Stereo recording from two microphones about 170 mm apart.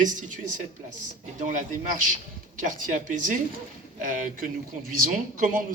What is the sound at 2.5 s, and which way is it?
A man's voice, 50° right (ahead or behind).